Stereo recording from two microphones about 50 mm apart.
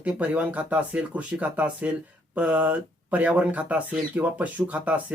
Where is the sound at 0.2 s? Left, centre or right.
Right.